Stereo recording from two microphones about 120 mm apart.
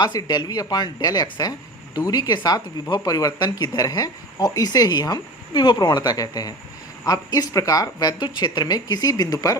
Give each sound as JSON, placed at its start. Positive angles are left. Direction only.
{"t": 0.0, "sound": "speech", "side_deg": 35}